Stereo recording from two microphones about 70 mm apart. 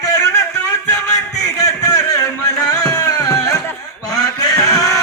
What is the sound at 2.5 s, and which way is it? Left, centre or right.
Tabla, left.